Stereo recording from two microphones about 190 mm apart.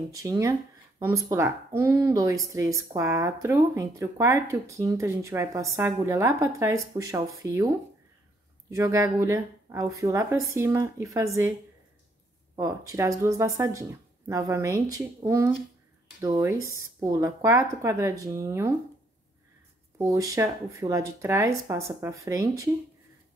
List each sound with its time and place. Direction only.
0.1 s speech: 15° right (ahead or behind)
12.5 s speech: 15° right (ahead or behind)
20.0 s speech: 15° right (ahead or behind)